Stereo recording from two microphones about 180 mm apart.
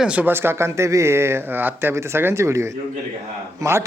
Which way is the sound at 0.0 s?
5° right (ahead or behind).